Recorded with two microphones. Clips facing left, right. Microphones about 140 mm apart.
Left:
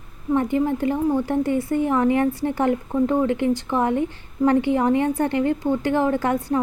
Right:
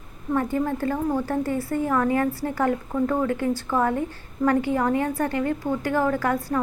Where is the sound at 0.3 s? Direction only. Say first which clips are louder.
Left 3 dB; 20° left (ahead or behind).